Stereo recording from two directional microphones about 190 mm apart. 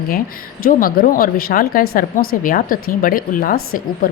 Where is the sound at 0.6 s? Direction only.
50° left (ahead or behind).